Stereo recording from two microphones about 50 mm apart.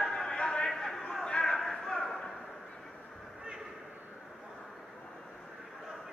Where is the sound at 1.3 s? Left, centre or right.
Left.